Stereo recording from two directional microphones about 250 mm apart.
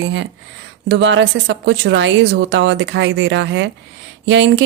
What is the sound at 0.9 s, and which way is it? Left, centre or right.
Speech, right.